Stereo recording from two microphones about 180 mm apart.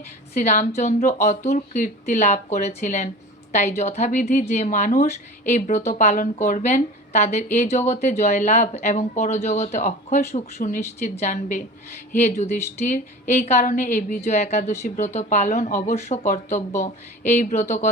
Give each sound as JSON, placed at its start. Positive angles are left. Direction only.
{"t": 0.5, "sound": "a woman's voice", "side_deg": 40}